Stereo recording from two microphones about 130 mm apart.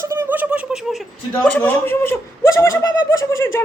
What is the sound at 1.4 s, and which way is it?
Speech, 15° left (ahead or behind).